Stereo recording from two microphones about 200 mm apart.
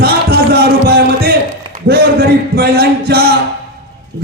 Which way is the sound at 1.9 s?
50° right (ahead or behind).